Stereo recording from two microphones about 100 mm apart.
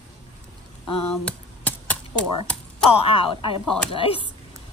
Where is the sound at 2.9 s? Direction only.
65° left (ahead or behind).